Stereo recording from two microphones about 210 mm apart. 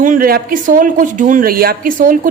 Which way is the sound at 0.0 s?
40° right (ahead or behind).